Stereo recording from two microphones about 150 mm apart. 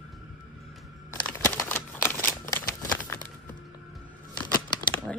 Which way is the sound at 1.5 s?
15° left (ahead or behind).